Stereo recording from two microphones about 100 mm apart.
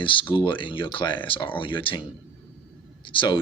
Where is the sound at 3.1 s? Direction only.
55° left (ahead or behind).